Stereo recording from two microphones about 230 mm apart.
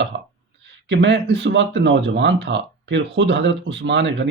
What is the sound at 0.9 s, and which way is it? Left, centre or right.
Speech, right.